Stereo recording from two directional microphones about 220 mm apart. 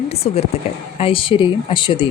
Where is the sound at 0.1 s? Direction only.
30° left (ahead or behind).